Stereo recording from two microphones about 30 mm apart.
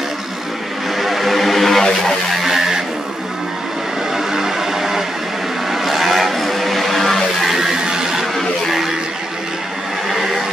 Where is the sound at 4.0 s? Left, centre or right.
Centre.